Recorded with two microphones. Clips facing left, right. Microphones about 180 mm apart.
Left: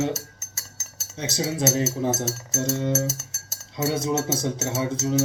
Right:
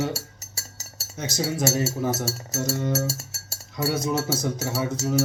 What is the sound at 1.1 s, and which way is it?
Speech, 25° left (ahead or behind).